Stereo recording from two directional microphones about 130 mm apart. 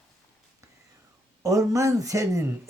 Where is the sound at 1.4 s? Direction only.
25° right (ahead or behind).